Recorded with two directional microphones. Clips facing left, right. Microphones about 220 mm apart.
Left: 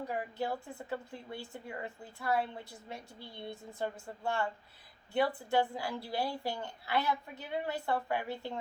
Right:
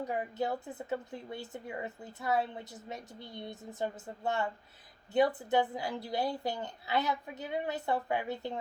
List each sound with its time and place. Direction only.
0.1 s a woman's voice: 20° right (ahead or behind)